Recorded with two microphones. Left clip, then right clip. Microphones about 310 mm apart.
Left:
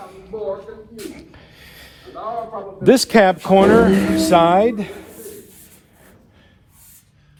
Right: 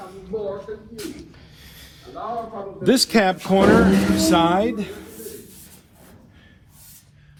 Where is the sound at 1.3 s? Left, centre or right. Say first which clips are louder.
Left 3 dB; left.